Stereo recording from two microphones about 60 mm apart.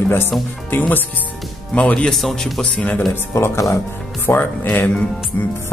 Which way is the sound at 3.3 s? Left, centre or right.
Left.